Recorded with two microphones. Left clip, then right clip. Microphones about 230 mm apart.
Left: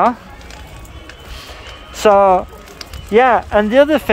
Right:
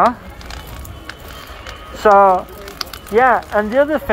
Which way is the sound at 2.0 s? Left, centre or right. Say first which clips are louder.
Even; left.